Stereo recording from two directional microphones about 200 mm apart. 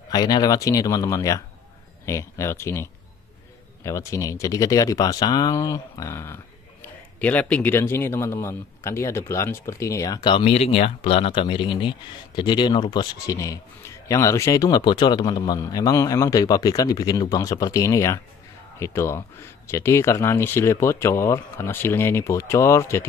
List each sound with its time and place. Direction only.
0.1 s speech: 20° left (ahead or behind)